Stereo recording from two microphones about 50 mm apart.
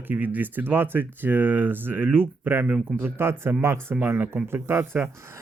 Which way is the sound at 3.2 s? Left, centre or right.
Right.